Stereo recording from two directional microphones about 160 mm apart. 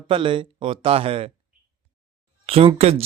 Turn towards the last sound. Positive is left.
turn(degrees=-40)  # may be behind; listen again after turning